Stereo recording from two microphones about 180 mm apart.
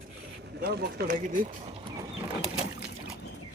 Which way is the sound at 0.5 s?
60° right (ahead or behind).